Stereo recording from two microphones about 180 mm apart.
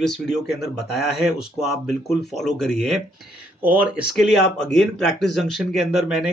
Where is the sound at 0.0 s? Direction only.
Centre (ahead or behind).